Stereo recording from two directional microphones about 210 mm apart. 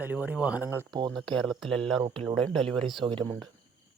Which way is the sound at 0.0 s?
10° right (ahead or behind).